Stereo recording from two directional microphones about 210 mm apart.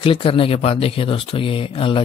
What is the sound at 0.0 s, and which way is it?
Speech, 25° left (ahead or behind).